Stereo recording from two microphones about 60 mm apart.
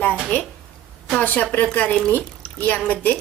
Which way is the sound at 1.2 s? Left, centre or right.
Left.